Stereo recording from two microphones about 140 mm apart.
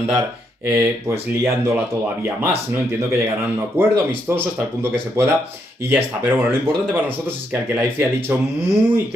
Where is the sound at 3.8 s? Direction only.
15° right (ahead or behind).